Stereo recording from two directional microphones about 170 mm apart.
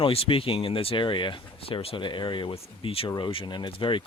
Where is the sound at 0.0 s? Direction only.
35° left (ahead or behind).